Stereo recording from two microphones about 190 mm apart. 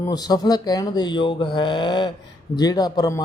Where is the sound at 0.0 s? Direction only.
20° left (ahead or behind).